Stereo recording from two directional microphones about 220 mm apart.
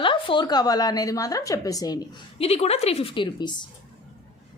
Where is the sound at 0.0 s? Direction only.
20° left (ahead or behind).